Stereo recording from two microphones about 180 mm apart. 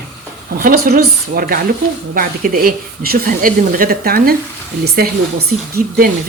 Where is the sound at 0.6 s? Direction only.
55° right (ahead or behind).